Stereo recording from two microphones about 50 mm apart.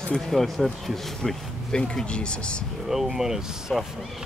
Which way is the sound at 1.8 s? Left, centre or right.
Centre.